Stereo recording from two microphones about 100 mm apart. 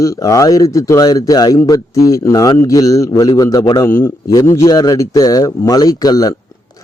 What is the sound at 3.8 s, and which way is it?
A man's voice, 25° left (ahead or behind).